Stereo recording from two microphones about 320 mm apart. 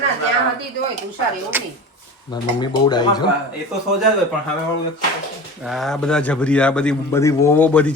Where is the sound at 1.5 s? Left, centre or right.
Centre.